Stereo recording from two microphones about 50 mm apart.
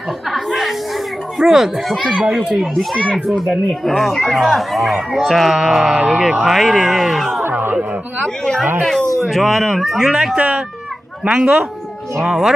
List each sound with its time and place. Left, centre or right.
0.3 s chatter: centre
1.4 s speech: centre
9.2 s speech: centre
10.0 s speech: centre